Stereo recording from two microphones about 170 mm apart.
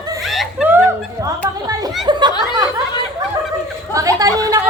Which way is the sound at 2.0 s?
25° right (ahead or behind).